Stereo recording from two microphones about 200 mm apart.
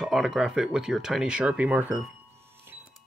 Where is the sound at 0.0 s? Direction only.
Centre (ahead or behind).